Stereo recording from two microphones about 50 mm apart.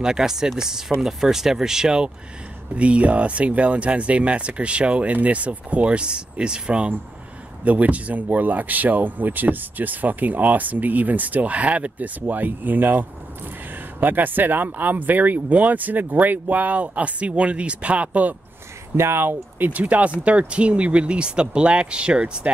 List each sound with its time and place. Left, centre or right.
0.0 s speech: centre
2.7 s speech: right
18.9 s speech: right
19.7 s speech: right